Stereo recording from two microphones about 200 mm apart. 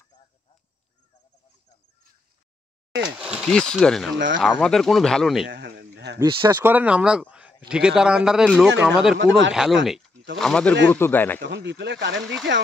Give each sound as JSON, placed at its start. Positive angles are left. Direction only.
{"t": 3.0, "sound": "speech", "side_deg": -5}
{"t": 5.5, "sound": "a sound", "side_deg": -55}
{"t": 6.1, "sound": "speech", "side_deg": -15}
{"t": 6.7, "sound": "speech", "side_deg": -5}
{"t": 9.2, "sound": "speech", "side_deg": -65}
{"t": 9.5, "sound": "speech", "side_deg": 0}
{"t": 9.8, "sound": "a sound", "side_deg": 0}
{"t": 10.3, "sound": "speech", "side_deg": 5}
{"t": 11.4, "sound": "speech", "side_deg": -60}